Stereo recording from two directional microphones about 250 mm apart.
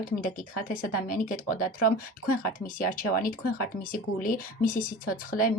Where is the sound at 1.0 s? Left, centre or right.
Left.